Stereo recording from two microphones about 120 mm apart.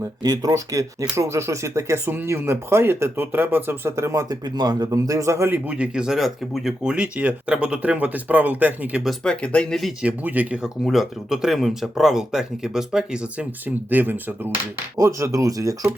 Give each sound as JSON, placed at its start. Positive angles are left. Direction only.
{"t": 0.2, "sound": "speech", "side_deg": -30}
{"t": 9.0, "sound": "speech", "side_deg": 10}
{"t": 10.1, "sound": "speech", "side_deg": -10}